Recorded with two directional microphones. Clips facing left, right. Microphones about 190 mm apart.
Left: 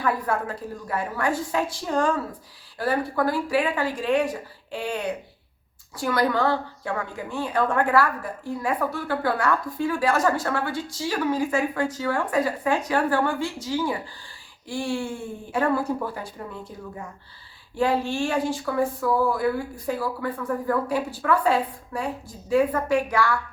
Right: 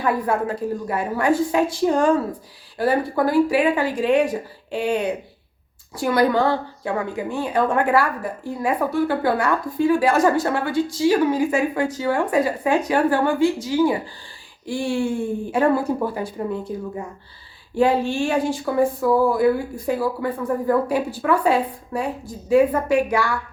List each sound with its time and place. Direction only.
0.0 s a woman's voice: 15° right (ahead or behind)
17.7 s a woman's voice: 20° right (ahead or behind)